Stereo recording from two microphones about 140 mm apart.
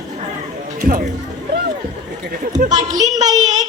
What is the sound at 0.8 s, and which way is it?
Speech, 90° right.